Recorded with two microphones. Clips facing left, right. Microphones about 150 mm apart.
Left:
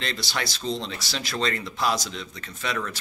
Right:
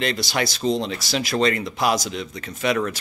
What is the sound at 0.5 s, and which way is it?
Speech, 15° right (ahead or behind).